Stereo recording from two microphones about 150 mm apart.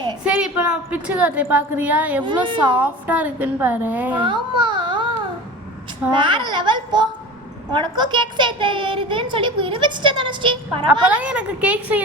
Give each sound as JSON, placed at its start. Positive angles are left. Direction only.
{"t": 0.3, "sound": "a woman's voice", "side_deg": -5}
{"t": 2.2, "sound": "a woman's voice", "side_deg": -30}
{"t": 2.8, "sound": "a woman's voice", "side_deg": -10}
{"t": 4.2, "sound": "a child's voice", "side_deg": -30}
{"t": 6.1, "sound": "a woman's voice", "side_deg": -30}
{"t": 11.0, "sound": "a woman's voice", "side_deg": -10}